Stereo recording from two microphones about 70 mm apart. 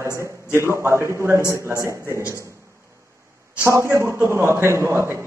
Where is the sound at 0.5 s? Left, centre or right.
Right.